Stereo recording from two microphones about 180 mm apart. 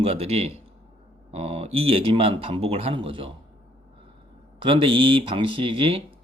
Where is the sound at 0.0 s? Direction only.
35° right (ahead or behind).